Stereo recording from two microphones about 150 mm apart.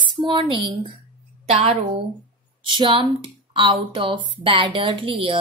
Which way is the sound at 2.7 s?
35° right (ahead or behind).